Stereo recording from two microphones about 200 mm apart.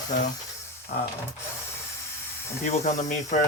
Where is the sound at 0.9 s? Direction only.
35° left (ahead or behind).